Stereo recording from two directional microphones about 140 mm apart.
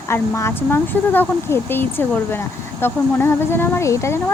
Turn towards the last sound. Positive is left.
turn(degrees=20)  # may be behind; listen again after turning